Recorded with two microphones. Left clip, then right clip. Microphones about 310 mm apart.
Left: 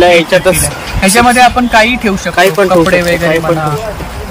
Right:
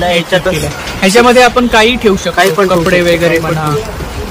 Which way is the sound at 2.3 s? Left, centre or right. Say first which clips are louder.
Left 5 dB; left.